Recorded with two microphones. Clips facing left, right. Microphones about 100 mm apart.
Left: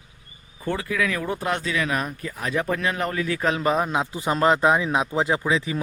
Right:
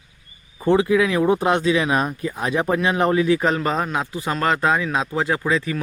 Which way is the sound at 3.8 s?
20° left (ahead or behind).